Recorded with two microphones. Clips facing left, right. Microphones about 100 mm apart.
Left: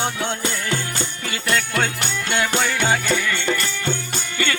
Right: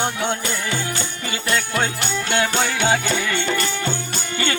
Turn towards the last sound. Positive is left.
turn(degrees=-25)  # may be behind; listen again after turning